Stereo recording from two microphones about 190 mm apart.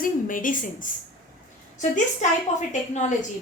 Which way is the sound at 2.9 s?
40° left (ahead or behind).